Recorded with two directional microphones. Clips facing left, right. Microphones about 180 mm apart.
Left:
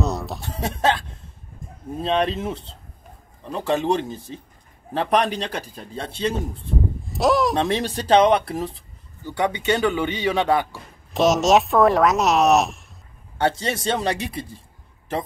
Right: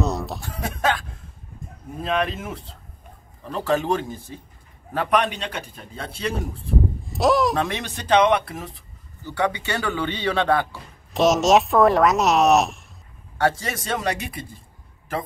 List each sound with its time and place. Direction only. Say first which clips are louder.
0.0 s a sound: even; centre (ahead or behind)
0.4 s speech: left 2 dB; 25° left (ahead or behind)
2.0 s speech: left 3 dB; 30° left (ahead or behind)
4.9 s a man's voice: left 1 dB; 35° left (ahead or behind)
7.1 s a sound: even; centre (ahead or behind)
7.5 s a man's voice: left 4 dB; 30° left (ahead or behind)
9.2 s speech: left 1 dB; 20° left (ahead or behind)
11.1 s speech: even; centre (ahead or behind)
13.4 s speech: left 1 dB; 25° left (ahead or behind)